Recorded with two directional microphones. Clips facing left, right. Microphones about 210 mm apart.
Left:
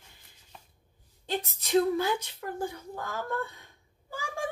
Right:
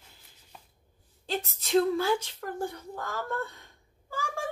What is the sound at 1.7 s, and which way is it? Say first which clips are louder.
A woman's voice: right 1 dB; 15° left (ahead or behind).